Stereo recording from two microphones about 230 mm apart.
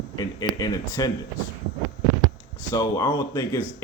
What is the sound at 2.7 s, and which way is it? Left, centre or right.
Speech, centre.